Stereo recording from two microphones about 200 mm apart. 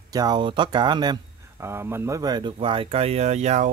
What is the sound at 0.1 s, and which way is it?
Speech, 20° right (ahead or behind).